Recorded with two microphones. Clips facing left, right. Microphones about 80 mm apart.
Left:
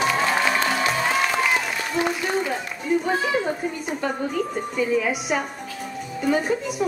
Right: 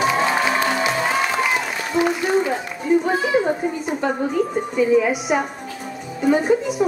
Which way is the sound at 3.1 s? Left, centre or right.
Centre.